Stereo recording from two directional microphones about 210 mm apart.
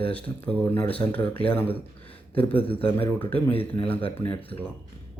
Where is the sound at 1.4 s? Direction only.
10° left (ahead or behind).